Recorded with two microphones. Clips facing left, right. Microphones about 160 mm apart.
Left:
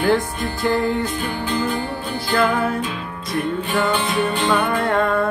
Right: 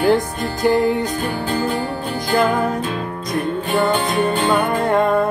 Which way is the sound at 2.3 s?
30° right (ahead or behind).